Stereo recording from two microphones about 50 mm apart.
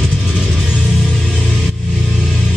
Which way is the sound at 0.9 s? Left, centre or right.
Centre.